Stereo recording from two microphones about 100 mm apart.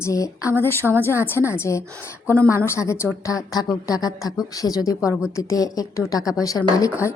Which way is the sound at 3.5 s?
40° left (ahead or behind).